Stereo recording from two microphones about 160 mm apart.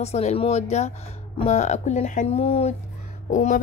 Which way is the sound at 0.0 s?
40° left (ahead or behind).